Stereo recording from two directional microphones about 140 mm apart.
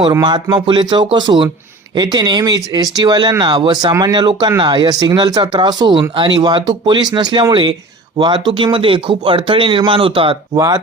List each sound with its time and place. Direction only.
0.1 s speech: 30° right (ahead or behind)
10.5 s speech: 25° right (ahead or behind)